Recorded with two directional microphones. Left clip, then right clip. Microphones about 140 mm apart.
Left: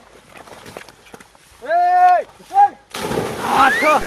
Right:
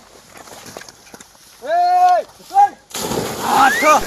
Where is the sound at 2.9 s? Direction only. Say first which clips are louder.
Even; 15° right (ahead or behind).